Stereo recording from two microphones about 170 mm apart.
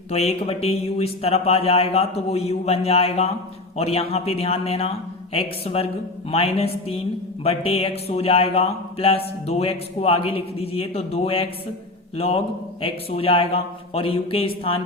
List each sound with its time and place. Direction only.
0.1 s speech: 40° left (ahead or behind)